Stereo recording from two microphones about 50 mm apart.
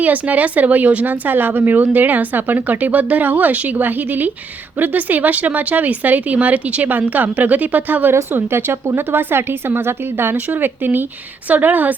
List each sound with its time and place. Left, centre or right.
0.0 s speech: right
8.3 s a woman's voice: right